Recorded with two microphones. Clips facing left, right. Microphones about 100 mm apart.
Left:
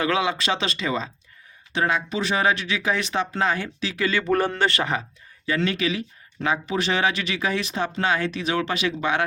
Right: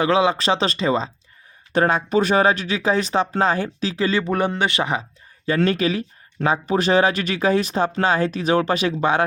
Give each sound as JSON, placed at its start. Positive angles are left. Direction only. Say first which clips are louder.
{"t": 0.0, "sound": "speech", "louder": "right 5 dB", "side_deg": -30}
{"t": 1.7, "sound": "speech", "louder": "right 6 dB", "side_deg": -45}
{"t": 4.3, "sound": "speech", "louder": "even", "side_deg": -15}
{"t": 5.5, "sound": "speech", "louder": "right 5 dB", "side_deg": -40}